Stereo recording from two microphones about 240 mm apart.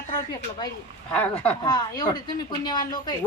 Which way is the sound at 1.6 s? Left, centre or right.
Centre.